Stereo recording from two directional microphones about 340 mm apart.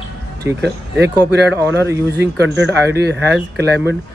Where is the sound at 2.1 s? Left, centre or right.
Right.